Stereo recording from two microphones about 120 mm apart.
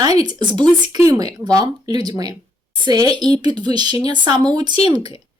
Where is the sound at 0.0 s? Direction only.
35° right (ahead or behind).